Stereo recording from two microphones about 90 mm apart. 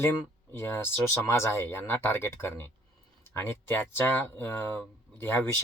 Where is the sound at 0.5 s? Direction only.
25° left (ahead or behind).